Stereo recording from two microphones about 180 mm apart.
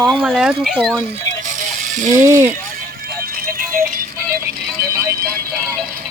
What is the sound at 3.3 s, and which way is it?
Music, 55° right (ahead or behind).